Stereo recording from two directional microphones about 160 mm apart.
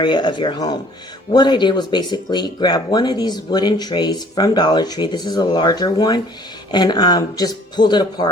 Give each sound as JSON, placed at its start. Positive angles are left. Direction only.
{"t": 0.0, "sound": "speech", "side_deg": 30}